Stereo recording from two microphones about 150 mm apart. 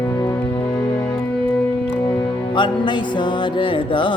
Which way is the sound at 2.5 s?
30° left (ahead or behind).